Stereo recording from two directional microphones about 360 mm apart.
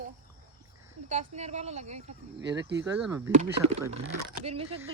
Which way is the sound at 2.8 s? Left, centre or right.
Centre.